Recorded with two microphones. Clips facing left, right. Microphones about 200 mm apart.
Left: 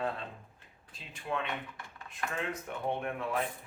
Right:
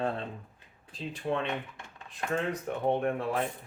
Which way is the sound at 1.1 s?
35° right (ahead or behind).